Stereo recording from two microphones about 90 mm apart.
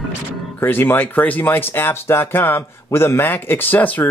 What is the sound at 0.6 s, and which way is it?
Speech, 25° left (ahead or behind).